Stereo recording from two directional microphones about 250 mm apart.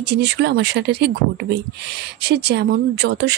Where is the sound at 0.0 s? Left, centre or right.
Right.